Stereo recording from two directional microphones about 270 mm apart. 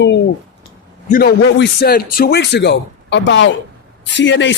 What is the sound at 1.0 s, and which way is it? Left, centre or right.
Speech, left.